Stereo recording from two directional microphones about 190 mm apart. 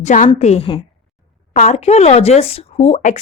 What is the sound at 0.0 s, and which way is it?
Speech, 40° left (ahead or behind).